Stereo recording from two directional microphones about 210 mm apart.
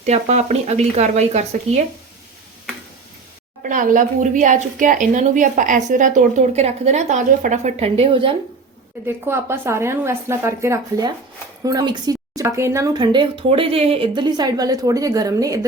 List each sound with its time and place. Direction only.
0.0 s speech: 35° right (ahead or behind)
3.6 s speech: 40° right (ahead or behind); by 8.4 s 25° right (ahead or behind)
9.0 s a woman's voice: 10° right (ahead or behind)